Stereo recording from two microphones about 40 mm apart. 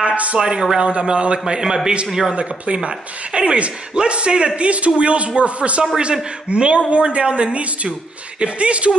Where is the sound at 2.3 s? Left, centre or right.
Right.